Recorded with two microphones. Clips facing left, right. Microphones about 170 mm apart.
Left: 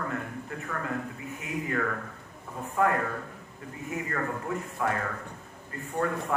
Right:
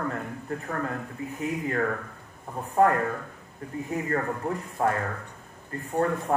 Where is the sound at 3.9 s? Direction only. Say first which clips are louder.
Right 3 dB; 35° right (ahead or behind).